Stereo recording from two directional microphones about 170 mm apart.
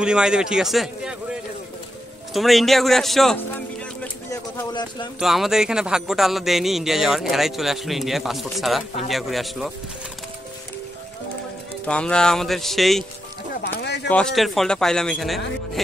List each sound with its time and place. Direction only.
0.0 s a man's voice: 5° right (ahead or behind)
4.3 s a sound: 20° left (ahead or behind)
5.2 s a man's voice: centre (ahead or behind)
11.8 s a man's voice: 5° left (ahead or behind)
13.6 s a sound: 75° left (ahead or behind)
14.0 s a man's voice: 5° left (ahead or behind)